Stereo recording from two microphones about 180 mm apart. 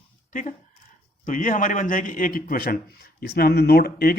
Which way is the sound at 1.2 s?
45° left (ahead or behind).